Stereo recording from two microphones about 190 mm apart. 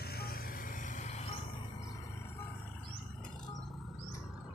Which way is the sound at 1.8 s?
15° left (ahead or behind).